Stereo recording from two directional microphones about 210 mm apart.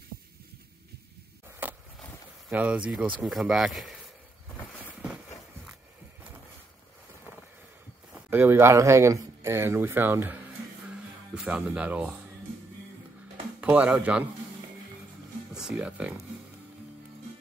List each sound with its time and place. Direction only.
1.6 s a sound: 10° right (ahead or behind)
2.5 s speech: 5° right (ahead or behind)
8.1 s speech: 10° right (ahead or behind)
13.6 s speech: 5° right (ahead or behind)
15.5 s speech: 5° right (ahead or behind)